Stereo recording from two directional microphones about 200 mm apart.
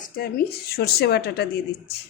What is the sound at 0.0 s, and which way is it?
Speech, 50° left (ahead or behind).